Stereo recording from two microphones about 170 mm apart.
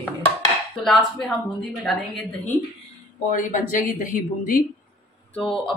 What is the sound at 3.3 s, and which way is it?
Speech, 50° left (ahead or behind).